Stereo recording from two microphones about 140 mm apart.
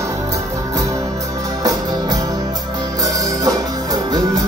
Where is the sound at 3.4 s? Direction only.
25° right (ahead or behind).